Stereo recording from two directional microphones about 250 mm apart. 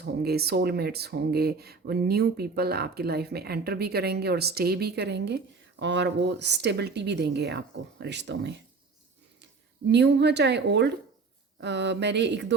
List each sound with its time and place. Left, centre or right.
0.0 s speech: right
9.9 s speech: right